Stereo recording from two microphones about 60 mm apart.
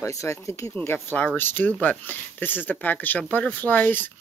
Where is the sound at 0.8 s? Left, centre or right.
Left.